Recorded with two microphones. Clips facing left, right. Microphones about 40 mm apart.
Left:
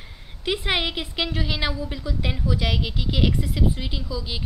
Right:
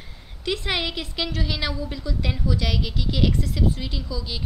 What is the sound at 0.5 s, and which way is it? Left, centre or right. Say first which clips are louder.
A woman's voice: left 2 dB; centre.